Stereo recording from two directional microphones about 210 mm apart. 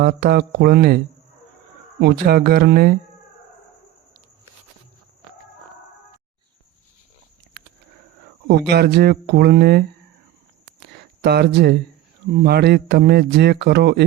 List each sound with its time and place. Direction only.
0.0 s a man's voice: 45° right (ahead or behind)
8.4 s a man's voice: 50° right (ahead or behind)
10.8 s a sound: 50° right (ahead or behind)
12.4 s a man's voice: 50° right (ahead or behind)